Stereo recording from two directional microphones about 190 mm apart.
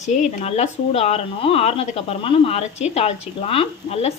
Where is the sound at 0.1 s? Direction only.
35° left (ahead or behind).